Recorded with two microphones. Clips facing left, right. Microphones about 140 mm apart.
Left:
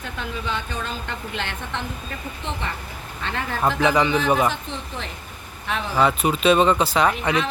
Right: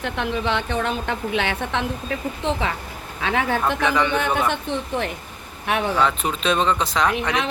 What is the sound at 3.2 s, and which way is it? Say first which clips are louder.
Speech: right 7 dB; 85° right.